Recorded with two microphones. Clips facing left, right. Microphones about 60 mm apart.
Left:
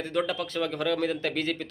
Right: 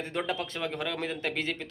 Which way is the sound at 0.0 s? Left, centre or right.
Right.